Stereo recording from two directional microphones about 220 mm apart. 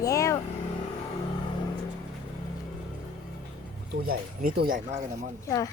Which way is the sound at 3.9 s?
40° right (ahead or behind).